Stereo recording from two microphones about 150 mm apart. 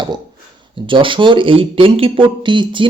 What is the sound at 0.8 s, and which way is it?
Speech, 35° right (ahead or behind).